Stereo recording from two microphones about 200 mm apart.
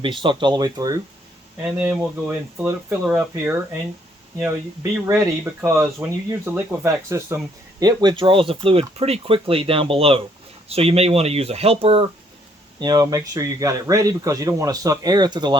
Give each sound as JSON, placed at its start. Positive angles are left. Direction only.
{"t": 0.0, "sound": "speech", "side_deg": -25}
{"t": 1.6, "sound": "speech", "side_deg": -5}